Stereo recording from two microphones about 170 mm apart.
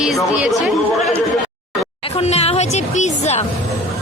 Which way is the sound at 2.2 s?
40° left (ahead or behind).